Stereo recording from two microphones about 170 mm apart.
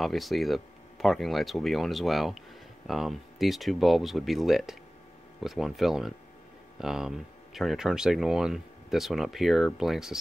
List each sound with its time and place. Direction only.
0.0 s speech: centre (ahead or behind)